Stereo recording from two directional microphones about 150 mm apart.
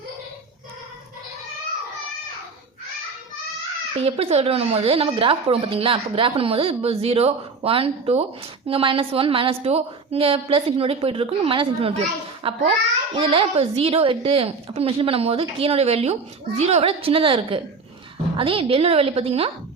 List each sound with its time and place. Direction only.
3.9 s a woman's voice: 40° right (ahead or behind)